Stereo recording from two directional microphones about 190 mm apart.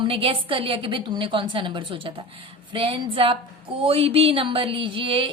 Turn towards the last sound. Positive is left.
turn(degrees=-25)  # may be behind; listen again after turning